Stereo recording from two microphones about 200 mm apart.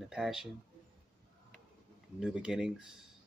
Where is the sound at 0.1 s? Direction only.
Centre (ahead or behind).